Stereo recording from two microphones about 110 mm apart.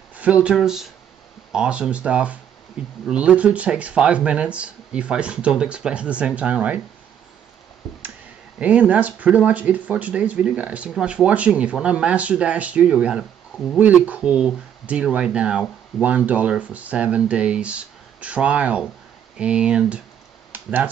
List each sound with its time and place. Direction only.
0.1 s speech: 10° right (ahead or behind)
8.5 s speech: 10° right (ahead or behind)